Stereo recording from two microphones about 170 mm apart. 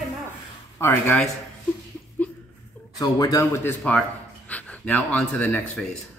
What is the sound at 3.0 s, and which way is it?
A woman's voice, 20° left (ahead or behind).